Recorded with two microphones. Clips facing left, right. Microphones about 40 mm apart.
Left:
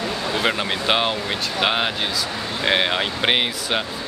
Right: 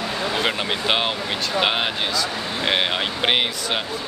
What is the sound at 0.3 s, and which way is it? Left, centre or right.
Speech, centre.